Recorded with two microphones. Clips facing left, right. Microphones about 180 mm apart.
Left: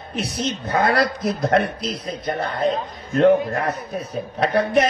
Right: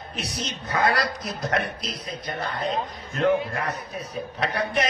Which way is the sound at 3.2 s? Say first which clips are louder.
Left 7 dB; 40° left (ahead or behind).